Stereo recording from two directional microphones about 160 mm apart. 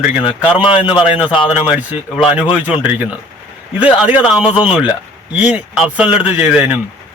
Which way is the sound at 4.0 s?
5° right (ahead or behind).